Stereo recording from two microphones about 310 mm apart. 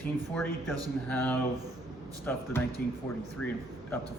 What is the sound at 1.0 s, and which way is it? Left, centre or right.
Speech, centre.